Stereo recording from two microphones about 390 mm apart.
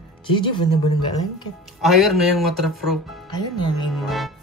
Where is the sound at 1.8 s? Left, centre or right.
Centre.